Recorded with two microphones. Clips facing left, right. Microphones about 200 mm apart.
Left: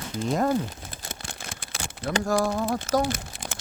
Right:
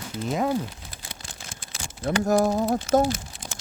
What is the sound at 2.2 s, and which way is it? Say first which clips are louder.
Speech: right 3 dB; 20° right (ahead or behind).